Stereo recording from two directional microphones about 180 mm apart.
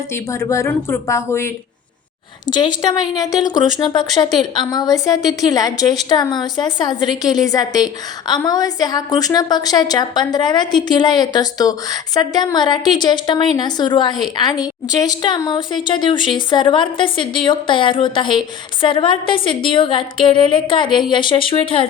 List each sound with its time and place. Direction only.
0.1 s speech: 15° left (ahead or behind)
2.5 s a woman's voice: 25° left (ahead or behind)